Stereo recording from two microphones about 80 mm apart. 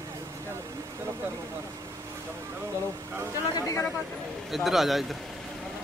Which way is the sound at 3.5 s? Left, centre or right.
Left.